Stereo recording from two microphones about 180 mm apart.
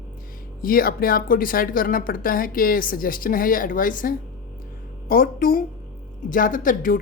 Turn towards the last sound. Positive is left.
turn(degrees=50)  # may be behind; listen again after turning